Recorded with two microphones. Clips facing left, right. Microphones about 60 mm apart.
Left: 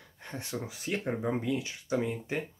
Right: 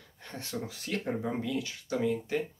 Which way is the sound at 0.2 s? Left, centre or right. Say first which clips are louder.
Even; left.